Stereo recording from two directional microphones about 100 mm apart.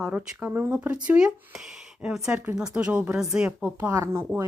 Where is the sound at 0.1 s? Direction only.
15° right (ahead or behind).